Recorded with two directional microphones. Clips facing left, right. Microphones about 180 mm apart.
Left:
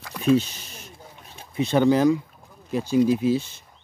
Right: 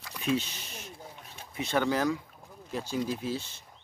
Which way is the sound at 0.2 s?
40° left (ahead or behind).